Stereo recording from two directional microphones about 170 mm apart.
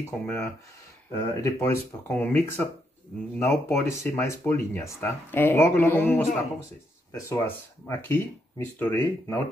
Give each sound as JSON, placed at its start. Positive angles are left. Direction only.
{"t": 0.0, "sound": "speech", "side_deg": 15}
{"t": 1.1, "sound": "speech", "side_deg": 25}
{"t": 1.6, "sound": "speech", "side_deg": 15}